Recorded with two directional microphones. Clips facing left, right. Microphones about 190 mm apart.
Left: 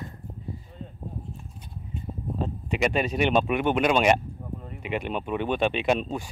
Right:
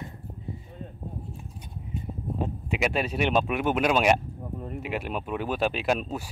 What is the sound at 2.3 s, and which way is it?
Speech, 5° right (ahead or behind).